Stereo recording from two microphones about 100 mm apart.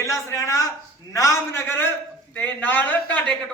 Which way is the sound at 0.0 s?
30° left (ahead or behind).